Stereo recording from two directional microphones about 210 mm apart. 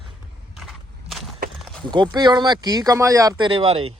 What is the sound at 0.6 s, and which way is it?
Walk, centre (ahead or behind).